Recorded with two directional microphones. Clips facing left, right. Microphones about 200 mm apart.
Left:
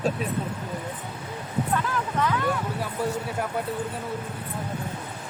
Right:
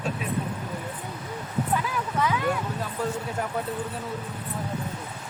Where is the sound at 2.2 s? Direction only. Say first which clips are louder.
Even; 10° right (ahead or behind).